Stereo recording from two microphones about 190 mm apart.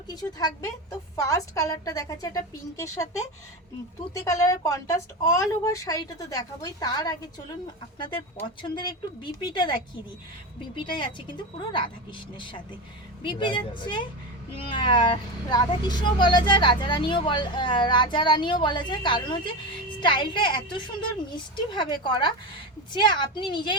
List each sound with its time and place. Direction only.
0.1 s a woman's voice: 20° left (ahead or behind)
8.6 s speech: 25° left (ahead or behind)
13.2 s speech: 25° left (ahead or behind)